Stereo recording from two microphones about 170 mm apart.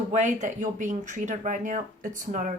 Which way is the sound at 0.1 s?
45° right (ahead or behind).